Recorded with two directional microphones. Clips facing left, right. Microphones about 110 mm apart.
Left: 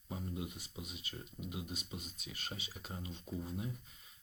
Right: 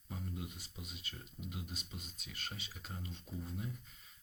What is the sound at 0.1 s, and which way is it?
Speech, 15° left (ahead or behind).